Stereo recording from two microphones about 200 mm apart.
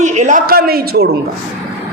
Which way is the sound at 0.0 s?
35° right (ahead or behind).